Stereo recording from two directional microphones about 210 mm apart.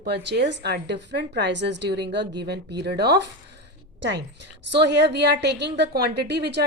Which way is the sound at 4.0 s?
55° right (ahead or behind).